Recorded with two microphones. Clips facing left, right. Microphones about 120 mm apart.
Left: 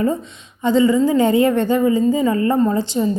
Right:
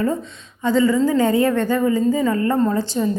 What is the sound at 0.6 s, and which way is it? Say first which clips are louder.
A woman's voice: left 2 dB; 20° left (ahead or behind).